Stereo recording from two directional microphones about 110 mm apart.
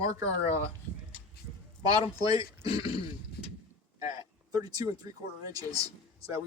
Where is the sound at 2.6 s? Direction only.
55° left (ahead or behind).